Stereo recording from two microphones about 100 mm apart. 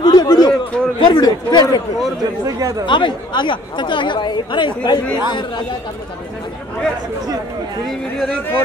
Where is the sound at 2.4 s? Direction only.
35° right (ahead or behind).